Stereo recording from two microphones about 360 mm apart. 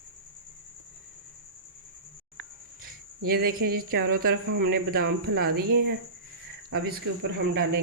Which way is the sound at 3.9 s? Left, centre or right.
Right.